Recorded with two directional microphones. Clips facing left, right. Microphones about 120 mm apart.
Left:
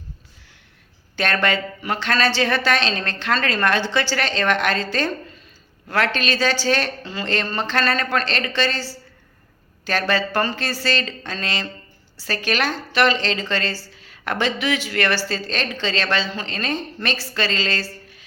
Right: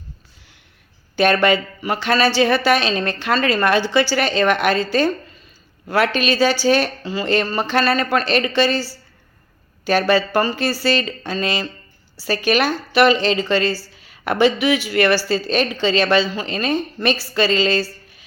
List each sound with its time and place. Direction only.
1.1 s a woman's voice: 15° right (ahead or behind)